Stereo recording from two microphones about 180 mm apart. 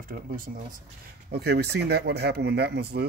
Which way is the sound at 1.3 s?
65° right (ahead or behind).